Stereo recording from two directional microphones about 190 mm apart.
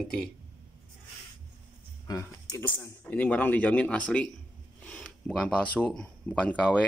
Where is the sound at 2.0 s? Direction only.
15° left (ahead or behind).